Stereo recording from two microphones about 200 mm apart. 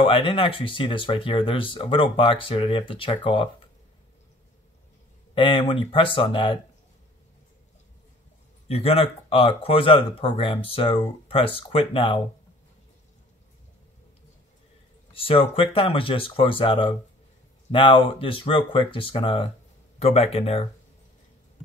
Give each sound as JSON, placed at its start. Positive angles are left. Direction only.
{"t": 0.0, "sound": "speech", "side_deg": 25}
{"t": 5.3, "sound": "speech", "side_deg": 25}
{"t": 8.6, "sound": "speech", "side_deg": 30}
{"t": 15.1, "sound": "speech", "side_deg": 30}